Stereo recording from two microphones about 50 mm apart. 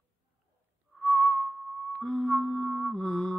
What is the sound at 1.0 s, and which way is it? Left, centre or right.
Whistling, centre.